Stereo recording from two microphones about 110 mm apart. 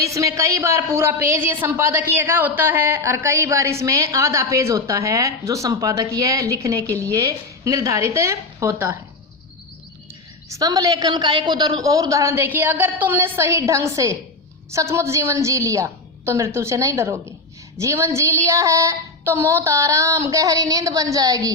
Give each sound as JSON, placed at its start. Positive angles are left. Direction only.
{"t": 0.0, "sound": "a woman's voice", "side_deg": -30}
{"t": 10.5, "sound": "a woman's voice", "side_deg": -35}